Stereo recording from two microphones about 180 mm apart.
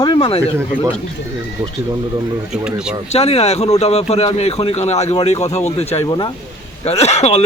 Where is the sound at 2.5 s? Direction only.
5° right (ahead or behind).